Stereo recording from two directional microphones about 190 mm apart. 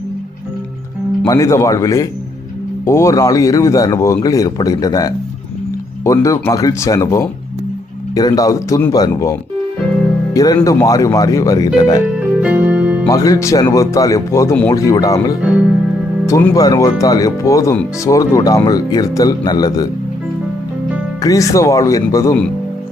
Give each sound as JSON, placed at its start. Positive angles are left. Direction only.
{"t": 1.2, "sound": "speech", "side_deg": 15}
{"t": 10.3, "sound": "speech", "side_deg": 20}
{"t": 12.4, "sound": "music", "side_deg": -5}
{"t": 13.1, "sound": "speech", "side_deg": 20}
{"t": 21.2, "sound": "speech", "side_deg": 15}